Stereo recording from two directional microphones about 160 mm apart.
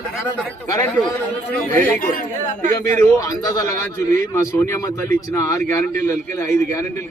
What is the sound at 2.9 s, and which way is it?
A man's voice, 20° left (ahead or behind).